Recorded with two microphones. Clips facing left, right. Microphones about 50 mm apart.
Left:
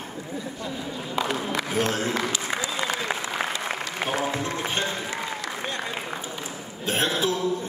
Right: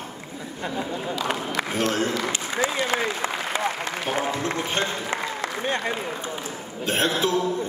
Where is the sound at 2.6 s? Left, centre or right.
Right.